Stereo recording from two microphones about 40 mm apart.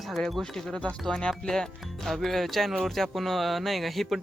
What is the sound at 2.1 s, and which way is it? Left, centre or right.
Speech, centre.